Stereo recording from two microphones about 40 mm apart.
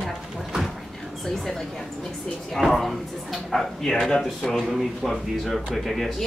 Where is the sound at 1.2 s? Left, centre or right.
Centre.